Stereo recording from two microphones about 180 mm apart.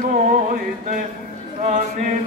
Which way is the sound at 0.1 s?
50° right (ahead or behind).